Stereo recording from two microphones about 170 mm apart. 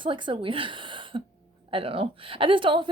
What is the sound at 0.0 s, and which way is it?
A woman's voice, 30° right (ahead or behind).